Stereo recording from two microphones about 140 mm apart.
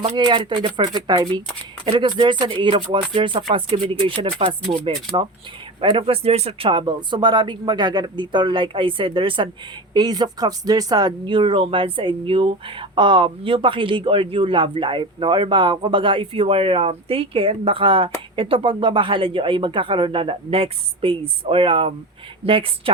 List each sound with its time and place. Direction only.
0.2 s speech: 30° right (ahead or behind)